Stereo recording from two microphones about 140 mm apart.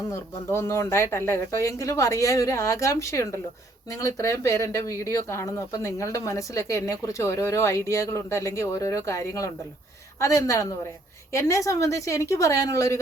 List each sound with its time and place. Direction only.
0.1 s speech: 20° left (ahead or behind)